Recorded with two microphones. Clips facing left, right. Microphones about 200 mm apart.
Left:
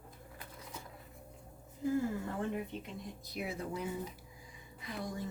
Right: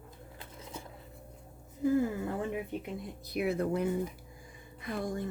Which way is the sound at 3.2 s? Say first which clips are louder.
Right 10 dB; 65° right (ahead or behind).